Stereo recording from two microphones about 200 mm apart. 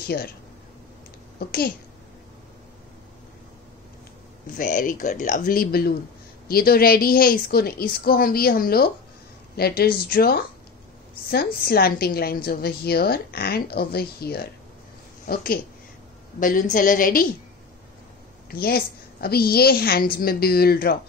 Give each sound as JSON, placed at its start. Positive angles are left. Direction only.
{"t": 1.4, "sound": "a woman's voice", "side_deg": 50}
{"t": 4.6, "sound": "a woman's voice", "side_deg": 40}
{"t": 18.5, "sound": "a woman's voice", "side_deg": 50}